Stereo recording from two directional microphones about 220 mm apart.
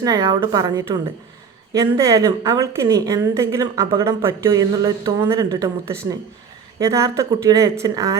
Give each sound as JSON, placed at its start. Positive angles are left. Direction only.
{"t": 0.0, "sound": "a woman's voice", "side_deg": -15}